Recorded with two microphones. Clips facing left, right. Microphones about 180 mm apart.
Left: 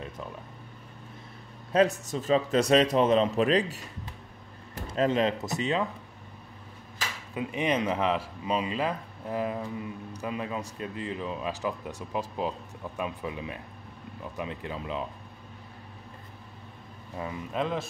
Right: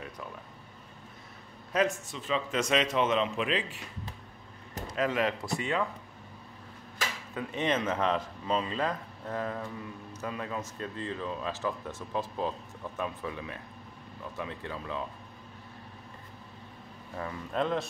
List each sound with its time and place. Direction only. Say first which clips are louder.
1.7 s a man's voice: left 5 dB; 35° left (ahead or behind)
7.3 s speech: left 2 dB; 10° left (ahead or behind)
17.2 s speech: left 2 dB; 15° left (ahead or behind)
17.6 s a man's voice: right 1 dB; centre (ahead or behind)